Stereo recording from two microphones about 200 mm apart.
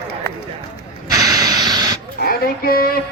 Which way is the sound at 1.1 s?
20° right (ahead or behind).